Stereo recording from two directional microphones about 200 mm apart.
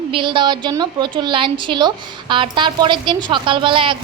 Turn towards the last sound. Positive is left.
turn(degrees=-25)  # may be behind; listen again after turning